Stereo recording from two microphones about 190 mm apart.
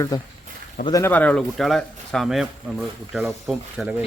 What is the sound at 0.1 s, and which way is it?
A child's voice, 20° left (ahead or behind).